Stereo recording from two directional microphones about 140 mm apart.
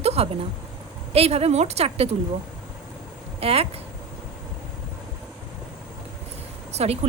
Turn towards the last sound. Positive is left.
turn(degrees=-45)  # may be behind; listen again after turning